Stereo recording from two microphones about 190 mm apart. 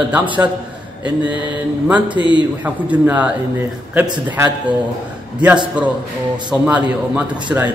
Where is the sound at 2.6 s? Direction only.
10° right (ahead or behind).